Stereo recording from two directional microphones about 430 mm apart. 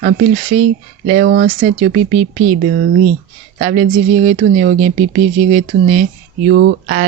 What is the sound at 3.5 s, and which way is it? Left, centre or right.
Speech, centre.